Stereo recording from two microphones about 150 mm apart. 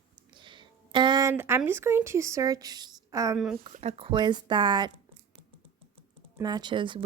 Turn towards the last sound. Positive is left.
turn(degrees=-35)  # may be behind; listen again after turning